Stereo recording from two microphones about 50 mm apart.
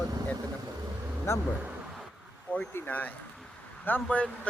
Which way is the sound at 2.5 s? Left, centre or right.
Left.